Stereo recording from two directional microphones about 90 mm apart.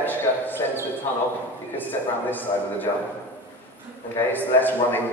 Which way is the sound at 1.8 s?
20° left (ahead or behind).